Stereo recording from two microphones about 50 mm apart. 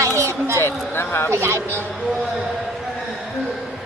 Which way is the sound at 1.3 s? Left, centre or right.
Right.